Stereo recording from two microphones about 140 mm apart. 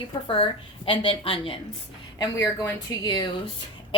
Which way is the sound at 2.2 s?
20° left (ahead or behind).